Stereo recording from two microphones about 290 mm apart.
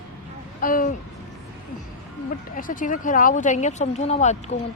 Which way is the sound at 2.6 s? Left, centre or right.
Left.